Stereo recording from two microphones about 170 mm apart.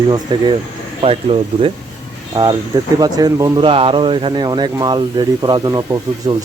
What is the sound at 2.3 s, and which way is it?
Speech, 25° right (ahead or behind).